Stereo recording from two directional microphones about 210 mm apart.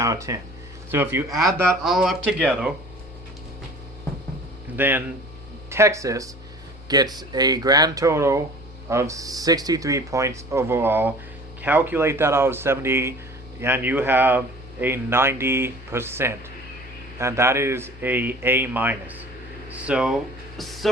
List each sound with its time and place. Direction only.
0.0 s speech: 15° right (ahead or behind)
1.8 s speech: centre (ahead or behind)
4.8 s speech: 10° right (ahead or behind)
20.6 s music: centre (ahead or behind)